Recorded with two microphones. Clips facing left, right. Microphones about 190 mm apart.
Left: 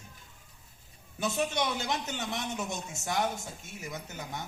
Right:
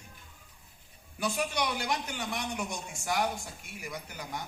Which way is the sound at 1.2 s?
25° left (ahead or behind).